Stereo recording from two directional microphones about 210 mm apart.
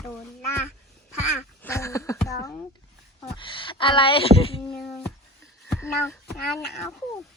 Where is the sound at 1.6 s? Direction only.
15° left (ahead or behind).